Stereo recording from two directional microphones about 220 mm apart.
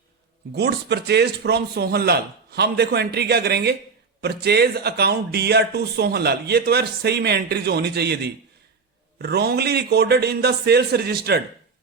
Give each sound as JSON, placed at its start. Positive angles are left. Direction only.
{"t": 0.5, "sound": "speech", "side_deg": -50}